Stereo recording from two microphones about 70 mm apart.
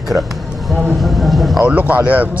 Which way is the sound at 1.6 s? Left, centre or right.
Right.